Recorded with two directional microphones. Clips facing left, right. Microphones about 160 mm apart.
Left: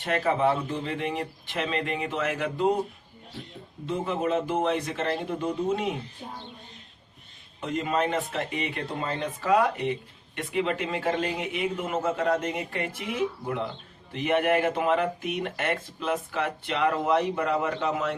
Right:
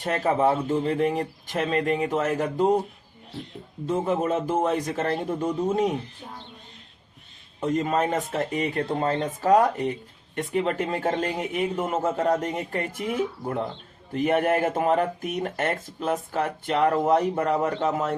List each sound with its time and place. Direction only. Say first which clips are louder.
0.0 s speech: right 2 dB; 40° right (ahead or behind)
3.8 s speech: right 3 dB; 45° right (ahead or behind)
7.6 s speech: right 3 dB; 45° right (ahead or behind)